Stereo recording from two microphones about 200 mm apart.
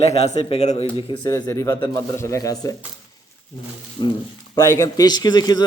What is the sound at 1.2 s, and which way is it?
Speech, 15° left (ahead or behind).